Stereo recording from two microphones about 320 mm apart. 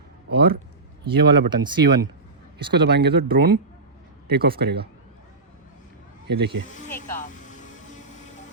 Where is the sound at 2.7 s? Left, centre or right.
Right.